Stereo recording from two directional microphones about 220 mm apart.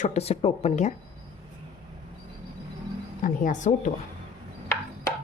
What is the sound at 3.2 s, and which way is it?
Speech, 35° left (ahead or behind).